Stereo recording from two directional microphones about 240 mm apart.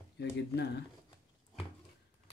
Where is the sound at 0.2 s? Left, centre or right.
Left.